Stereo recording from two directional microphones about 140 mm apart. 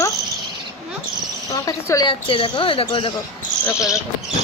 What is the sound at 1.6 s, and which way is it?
Speech, 25° left (ahead or behind).